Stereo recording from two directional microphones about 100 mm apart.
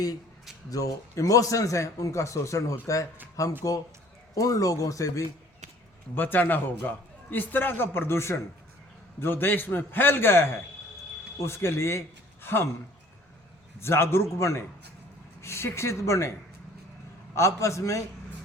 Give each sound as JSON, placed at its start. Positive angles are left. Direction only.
{"t": 0.7, "sound": "a man's voice", "side_deg": 35}
{"t": 6.1, "sound": "a man's voice", "side_deg": 20}
{"t": 13.7, "sound": "a man's voice", "side_deg": 25}
{"t": 17.3, "sound": "a man's voice", "side_deg": 30}